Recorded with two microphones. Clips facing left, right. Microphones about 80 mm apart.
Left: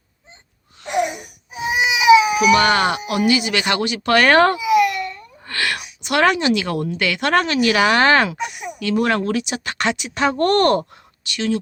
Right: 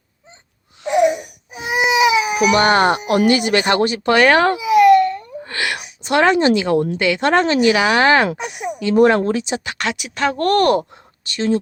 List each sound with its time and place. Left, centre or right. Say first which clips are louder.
1.9 s speech: left 4 dB; right
4.0 s speech: left 1 dB; centre
4.7 s baby cry: right 6 dB; right
5.5 s a sound: even; centre
6.0 s speech: right 3 dB; right
8.3 s speech: right 3 dB; right
8.8 s speech: right 6 dB; right
9.7 s speech: left 2 dB; centre
11.3 s speech: right 3 dB; right